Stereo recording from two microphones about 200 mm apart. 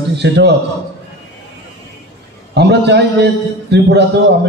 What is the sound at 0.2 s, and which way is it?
Speech, 55° right (ahead or behind).